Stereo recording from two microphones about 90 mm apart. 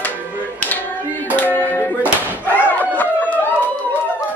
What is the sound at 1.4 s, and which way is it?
Music, 20° left (ahead or behind).